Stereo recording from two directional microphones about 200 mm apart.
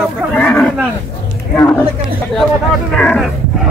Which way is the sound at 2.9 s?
5° left (ahead or behind).